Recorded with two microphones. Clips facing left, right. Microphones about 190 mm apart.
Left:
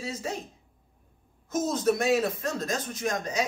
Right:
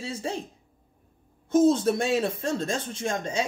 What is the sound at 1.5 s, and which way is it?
Speech, 30° right (ahead or behind).